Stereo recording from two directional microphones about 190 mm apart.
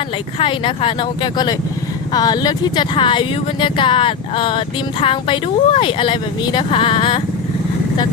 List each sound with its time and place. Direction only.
0.3 s speech: 30° left (ahead or behind)